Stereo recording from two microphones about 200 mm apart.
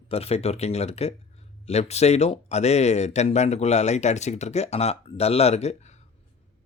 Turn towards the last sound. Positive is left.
turn(degrees=35)  # may be behind; listen again after turning